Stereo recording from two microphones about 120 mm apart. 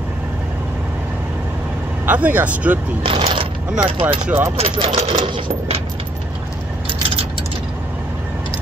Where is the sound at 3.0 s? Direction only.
50° right (ahead or behind).